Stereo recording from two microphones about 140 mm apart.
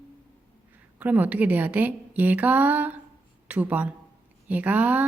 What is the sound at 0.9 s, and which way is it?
A woman's voice, 10° right (ahead or behind).